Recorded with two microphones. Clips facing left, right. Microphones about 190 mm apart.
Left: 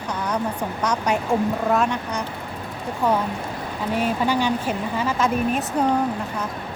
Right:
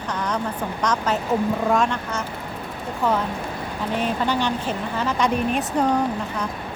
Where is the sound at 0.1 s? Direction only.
10° left (ahead or behind).